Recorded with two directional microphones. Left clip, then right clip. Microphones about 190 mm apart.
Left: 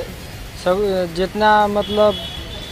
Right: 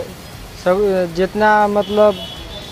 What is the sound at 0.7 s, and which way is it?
Speech, 15° right (ahead or behind).